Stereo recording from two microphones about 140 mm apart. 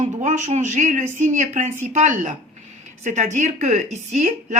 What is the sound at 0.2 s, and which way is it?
Speech, 60° right (ahead or behind).